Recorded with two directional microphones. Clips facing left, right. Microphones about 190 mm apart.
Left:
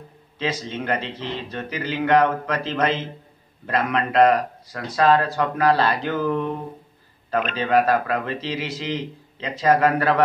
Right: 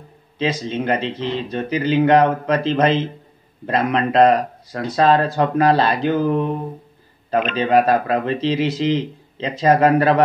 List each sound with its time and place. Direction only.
0.4 s a man's voice: 20° right (ahead or behind)